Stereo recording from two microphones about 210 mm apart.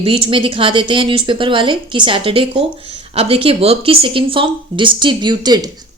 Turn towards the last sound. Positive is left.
turn(degrees=-20)  # may be behind; listen again after turning